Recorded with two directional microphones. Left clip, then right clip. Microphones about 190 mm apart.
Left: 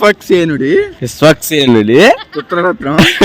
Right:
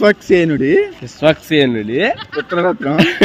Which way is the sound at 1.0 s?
55° left (ahead or behind).